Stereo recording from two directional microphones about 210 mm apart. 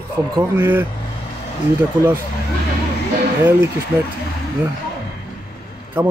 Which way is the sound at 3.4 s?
10° right (ahead or behind).